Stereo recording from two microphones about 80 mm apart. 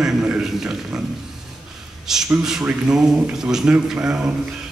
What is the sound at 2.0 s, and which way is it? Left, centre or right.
A man's voice, centre.